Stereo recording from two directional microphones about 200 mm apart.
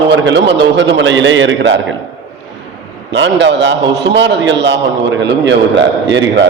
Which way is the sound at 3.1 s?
65° right (ahead or behind).